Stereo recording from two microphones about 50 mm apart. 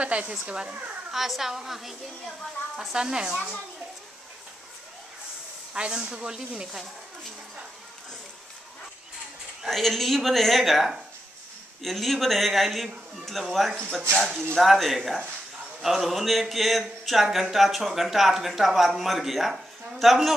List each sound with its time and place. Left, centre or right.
0.0 s speech: right
1.1 s speech: centre
5.7 s speech: centre
6.7 s speech: centre
9.7 s speech: centre